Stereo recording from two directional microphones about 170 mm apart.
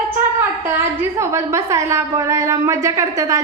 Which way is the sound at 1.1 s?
15° right (ahead or behind).